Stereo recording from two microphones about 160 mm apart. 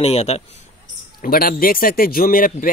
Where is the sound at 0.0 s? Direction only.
40° left (ahead or behind).